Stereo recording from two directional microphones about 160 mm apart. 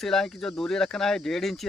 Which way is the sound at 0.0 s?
Centre (ahead or behind).